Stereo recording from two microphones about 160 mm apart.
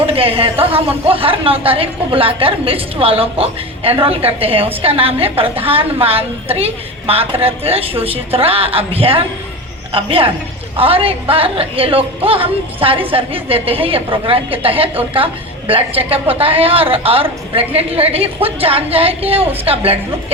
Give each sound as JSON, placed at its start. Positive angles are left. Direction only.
{"t": 0.0, "sound": "a man's voice", "side_deg": -35}